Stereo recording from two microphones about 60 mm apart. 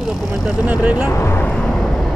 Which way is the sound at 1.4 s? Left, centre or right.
Centre.